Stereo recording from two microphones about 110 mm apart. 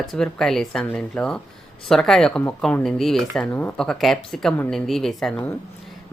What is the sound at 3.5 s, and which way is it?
Speech, 15° left (ahead or behind).